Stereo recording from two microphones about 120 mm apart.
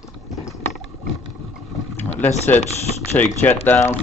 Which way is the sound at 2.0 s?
15° left (ahead or behind).